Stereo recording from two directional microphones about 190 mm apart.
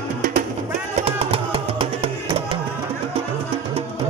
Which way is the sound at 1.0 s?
30° right (ahead or behind).